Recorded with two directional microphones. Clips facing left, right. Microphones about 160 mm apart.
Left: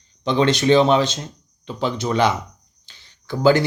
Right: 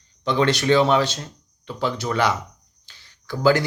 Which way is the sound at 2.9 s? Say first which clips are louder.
Left 3 dB; 25° left (ahead or behind).